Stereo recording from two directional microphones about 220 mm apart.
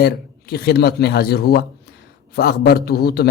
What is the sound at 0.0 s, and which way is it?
A man's voice, 45° left (ahead or behind).